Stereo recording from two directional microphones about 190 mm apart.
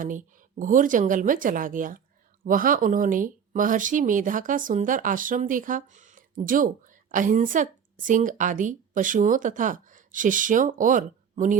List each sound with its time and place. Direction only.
0.0 s speech: 45° right (ahead or behind)